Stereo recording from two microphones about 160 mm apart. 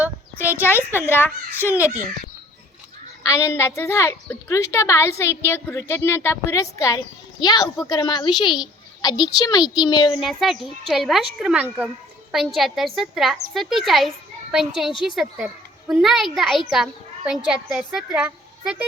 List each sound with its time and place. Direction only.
0.0 s a sound: 10° right (ahead or behind)
0.5 s a child's voice: 15° left (ahead or behind)
3.2 s a woman's voice: 20° left (ahead or behind)
10.2 s a child's voice: centre (ahead or behind)